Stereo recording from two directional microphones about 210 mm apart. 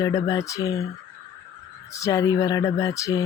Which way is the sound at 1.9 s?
15° left (ahead or behind).